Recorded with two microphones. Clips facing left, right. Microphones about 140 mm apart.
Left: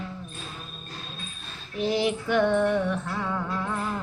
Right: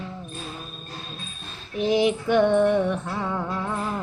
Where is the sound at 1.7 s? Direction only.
20° right (ahead or behind).